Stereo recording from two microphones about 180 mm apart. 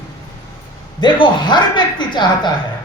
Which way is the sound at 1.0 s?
25° left (ahead or behind).